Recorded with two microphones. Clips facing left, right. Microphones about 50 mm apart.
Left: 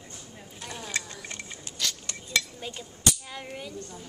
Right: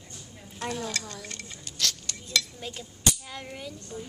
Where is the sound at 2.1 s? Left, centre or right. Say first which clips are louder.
Even; left.